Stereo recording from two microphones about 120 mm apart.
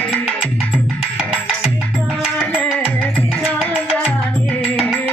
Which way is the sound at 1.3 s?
5° right (ahead or behind).